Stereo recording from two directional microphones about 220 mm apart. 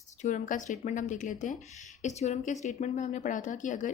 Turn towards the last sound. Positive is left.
turn(degrees=35)  # may be behind; listen again after turning